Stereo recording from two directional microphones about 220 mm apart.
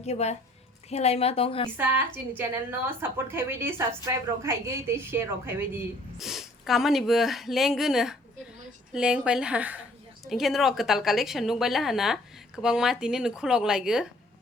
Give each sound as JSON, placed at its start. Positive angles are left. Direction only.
{"t": 0.0, "sound": "a woman's voice", "side_deg": 30}
{"t": 1.7, "sound": "a woman's voice", "side_deg": -10}